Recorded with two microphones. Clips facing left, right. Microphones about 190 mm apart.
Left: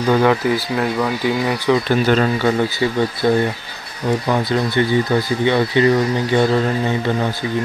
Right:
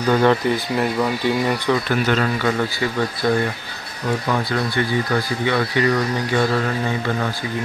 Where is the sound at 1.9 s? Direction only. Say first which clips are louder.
Left 4 dB; 30° left (ahead or behind).